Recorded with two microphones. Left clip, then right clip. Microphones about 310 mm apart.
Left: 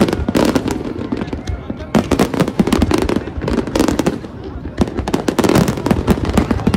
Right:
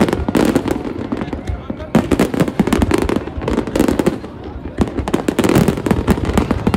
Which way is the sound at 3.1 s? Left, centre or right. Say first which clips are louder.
Even; centre.